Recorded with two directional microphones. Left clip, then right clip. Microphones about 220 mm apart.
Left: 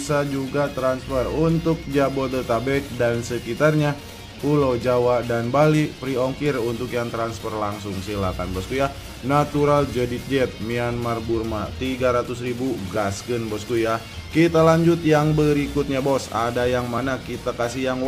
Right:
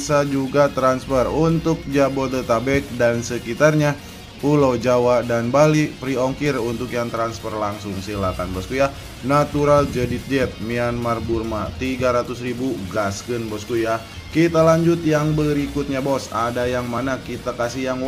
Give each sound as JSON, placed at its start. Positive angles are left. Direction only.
{"t": 0.1, "sound": "speech", "side_deg": 0}
{"t": 0.7, "sound": "speech", "side_deg": -15}
{"t": 1.7, "sound": "speech", "side_deg": 0}